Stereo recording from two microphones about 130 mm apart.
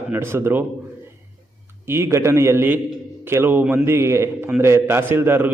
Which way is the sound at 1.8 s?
20° right (ahead or behind).